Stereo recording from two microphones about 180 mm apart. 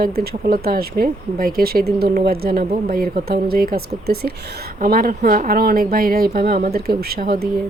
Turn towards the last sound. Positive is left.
turn(degrees=-55)  # may be behind; listen again after turning